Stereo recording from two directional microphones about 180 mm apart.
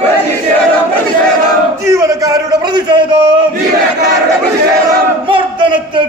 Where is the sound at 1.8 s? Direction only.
20° right (ahead or behind).